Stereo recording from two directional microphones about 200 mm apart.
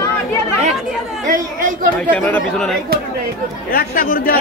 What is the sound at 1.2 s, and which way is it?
Chatter, 40° right (ahead or behind).